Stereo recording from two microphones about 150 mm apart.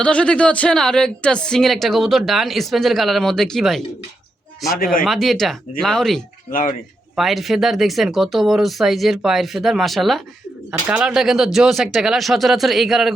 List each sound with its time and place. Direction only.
0.0 s a woman's voice: 5° left (ahead or behind)
5.0 s a woman's voice: centre (ahead or behind)
6.5 s speech: 65° left (ahead or behind)
7.2 s a woman's voice: centre (ahead or behind)